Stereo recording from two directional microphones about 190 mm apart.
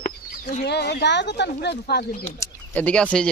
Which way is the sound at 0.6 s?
60° left (ahead or behind).